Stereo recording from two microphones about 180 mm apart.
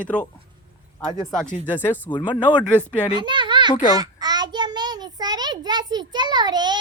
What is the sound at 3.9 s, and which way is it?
Child singing, 20° right (ahead or behind).